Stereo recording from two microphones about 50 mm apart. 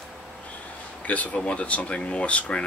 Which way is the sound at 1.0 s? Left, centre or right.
Left.